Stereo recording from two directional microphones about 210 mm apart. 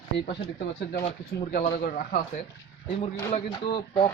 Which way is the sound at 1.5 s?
45° left (ahead or behind).